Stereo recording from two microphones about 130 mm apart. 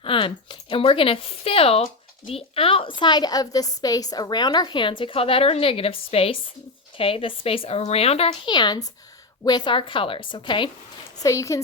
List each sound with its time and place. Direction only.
0.0 s speech: 40° left (ahead or behind)
8.4 s a woman's voice: 35° left (ahead or behind)
11.2 s speech: 25° left (ahead or behind)